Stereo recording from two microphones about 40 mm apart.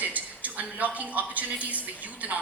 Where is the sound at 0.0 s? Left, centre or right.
Right.